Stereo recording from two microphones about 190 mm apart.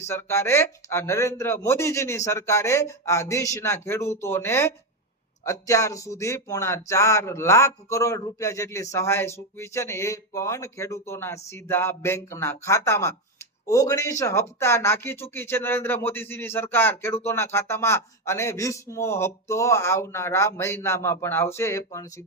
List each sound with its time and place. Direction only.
0.0 s speech: 15° left (ahead or behind)